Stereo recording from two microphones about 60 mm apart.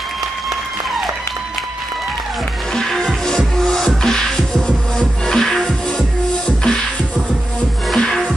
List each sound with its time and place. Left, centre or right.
2.7 s music: centre
7.9 s music: centre